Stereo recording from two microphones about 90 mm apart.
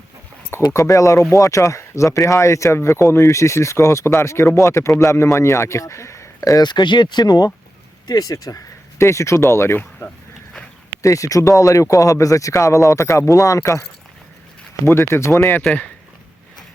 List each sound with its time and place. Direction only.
0.7 s speech: 35° left (ahead or behind)
6.6 s speech: 55° left (ahead or behind); by 9.8 s 25° left (ahead or behind)
11.0 s speech: 35° left (ahead or behind)
14.8 s speech: 30° left (ahead or behind)
15.6 s speech: 5° left (ahead or behind)